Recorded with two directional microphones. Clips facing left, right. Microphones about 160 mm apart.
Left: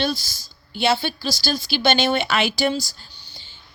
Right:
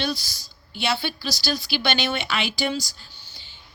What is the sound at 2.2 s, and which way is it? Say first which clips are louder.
Speech: left 5 dB; 40° left (ahead or behind).